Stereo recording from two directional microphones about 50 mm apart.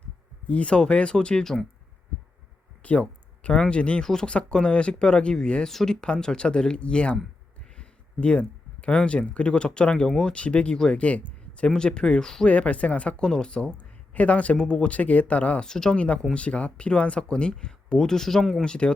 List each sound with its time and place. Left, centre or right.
0.4 s speech: left
2.8 s speech: left
4.0 s speech: centre
4.3 s speech: left
10.1 s speech: centre
10.3 s speech: left
11.7 s speech: centre
12.5 s speech: left
13.2 s speech: centre
14.1 s speech: left
15.6 s speech: centre